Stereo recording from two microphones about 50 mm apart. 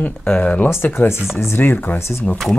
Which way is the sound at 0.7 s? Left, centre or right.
Left.